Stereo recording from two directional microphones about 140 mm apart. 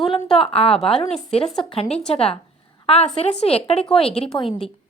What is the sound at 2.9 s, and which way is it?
A woman's voice, 45° left (ahead or behind).